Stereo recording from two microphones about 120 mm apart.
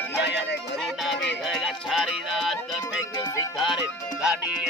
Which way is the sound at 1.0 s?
Centre (ahead or behind).